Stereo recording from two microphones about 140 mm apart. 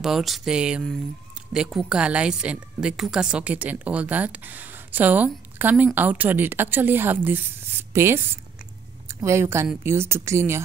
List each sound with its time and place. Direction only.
0.0 s a woman's voice: centre (ahead or behind); by 10.6 s 20° right (ahead or behind)